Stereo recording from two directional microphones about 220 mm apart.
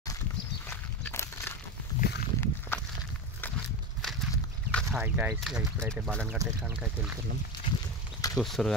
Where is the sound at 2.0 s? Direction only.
40° left (ahead or behind).